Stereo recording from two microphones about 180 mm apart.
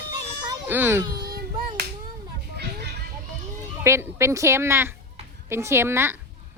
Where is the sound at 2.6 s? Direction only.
65° right (ahead or behind).